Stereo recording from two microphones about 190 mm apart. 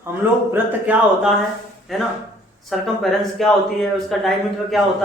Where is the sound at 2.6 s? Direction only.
Centre (ahead or behind).